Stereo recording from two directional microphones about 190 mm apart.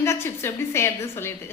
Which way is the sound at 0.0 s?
15° left (ahead or behind).